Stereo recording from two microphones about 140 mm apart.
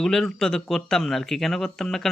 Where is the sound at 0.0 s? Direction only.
5° left (ahead or behind).